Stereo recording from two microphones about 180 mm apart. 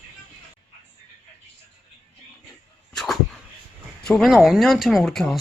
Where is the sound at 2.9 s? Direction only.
Centre (ahead or behind).